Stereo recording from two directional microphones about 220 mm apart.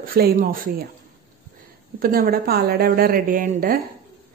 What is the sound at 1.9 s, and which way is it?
Speech, 40° right (ahead or behind).